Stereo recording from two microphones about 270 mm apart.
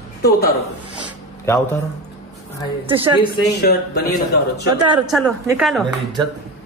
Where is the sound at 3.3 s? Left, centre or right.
Left.